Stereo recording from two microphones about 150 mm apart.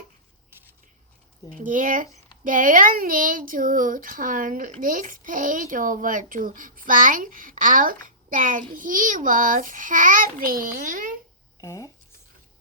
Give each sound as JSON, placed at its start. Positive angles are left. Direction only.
{"t": 1.6, "sound": "a child's voice", "side_deg": -60}
{"t": 11.6, "sound": "speech", "side_deg": 20}